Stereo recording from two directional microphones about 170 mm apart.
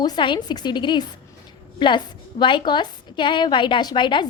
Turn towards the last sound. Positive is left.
turn(degrees=30)  # may be behind; listen again after turning